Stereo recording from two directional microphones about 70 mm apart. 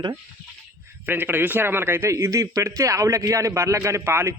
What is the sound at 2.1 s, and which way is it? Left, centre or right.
A man's voice, right.